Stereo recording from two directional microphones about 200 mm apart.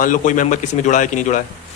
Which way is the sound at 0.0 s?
40° left (ahead or behind).